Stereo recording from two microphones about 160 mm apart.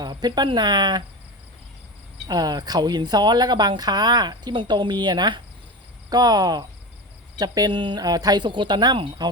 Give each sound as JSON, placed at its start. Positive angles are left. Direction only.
{"t": 0.0, "sound": "speech", "side_deg": -25}
{"t": 2.2, "sound": "speech", "side_deg": -25}